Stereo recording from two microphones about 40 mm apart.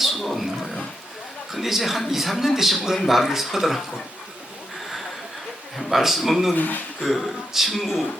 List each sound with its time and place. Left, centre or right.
0.0 s a sound: centre
1.5 s speech: centre
5.7 s speech: centre
6.5 s speech: left
7.0 s speech: centre